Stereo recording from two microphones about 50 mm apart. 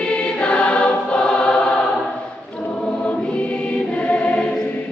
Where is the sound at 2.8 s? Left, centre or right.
Left.